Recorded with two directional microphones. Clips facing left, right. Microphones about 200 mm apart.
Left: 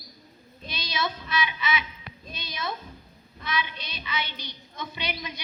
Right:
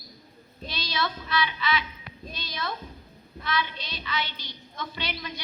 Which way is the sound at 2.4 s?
15° left (ahead or behind).